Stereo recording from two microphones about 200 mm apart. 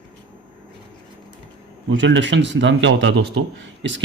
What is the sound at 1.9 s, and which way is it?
Speech, 65° right (ahead or behind).